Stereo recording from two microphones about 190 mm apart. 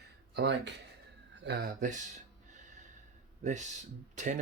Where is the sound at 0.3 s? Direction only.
65° right (ahead or behind).